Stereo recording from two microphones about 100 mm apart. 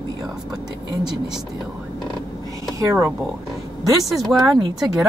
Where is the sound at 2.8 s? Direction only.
30° right (ahead or behind).